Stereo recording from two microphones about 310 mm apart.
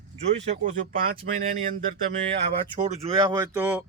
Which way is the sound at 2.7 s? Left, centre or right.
Right.